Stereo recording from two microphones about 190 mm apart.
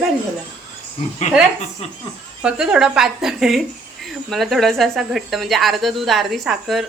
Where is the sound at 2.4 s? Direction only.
5° right (ahead or behind).